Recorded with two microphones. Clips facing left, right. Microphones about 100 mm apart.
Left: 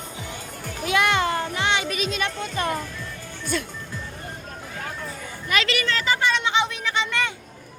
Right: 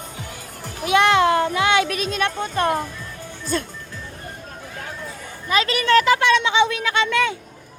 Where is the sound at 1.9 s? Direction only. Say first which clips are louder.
Right 3 dB; 45° right (ahead or behind).